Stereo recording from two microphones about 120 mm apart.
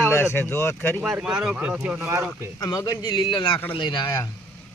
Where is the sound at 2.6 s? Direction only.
30° left (ahead or behind).